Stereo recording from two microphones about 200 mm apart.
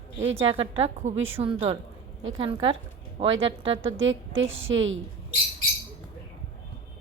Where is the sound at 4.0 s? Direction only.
70° right (ahead or behind).